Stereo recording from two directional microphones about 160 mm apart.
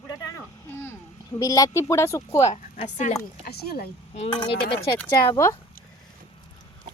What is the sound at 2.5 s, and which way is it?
Speech, 45° left (ahead or behind).